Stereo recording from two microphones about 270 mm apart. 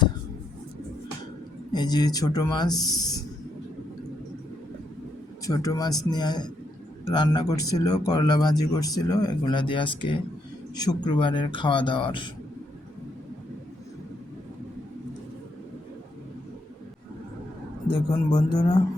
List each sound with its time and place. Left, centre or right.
1.7 s speech: centre
5.5 s speech: centre
18.3 s speech: centre